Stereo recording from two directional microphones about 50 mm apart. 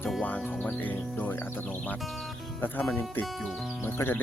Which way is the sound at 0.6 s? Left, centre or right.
Left.